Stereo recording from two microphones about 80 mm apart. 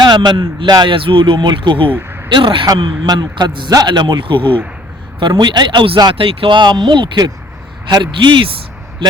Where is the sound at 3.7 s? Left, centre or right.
Right.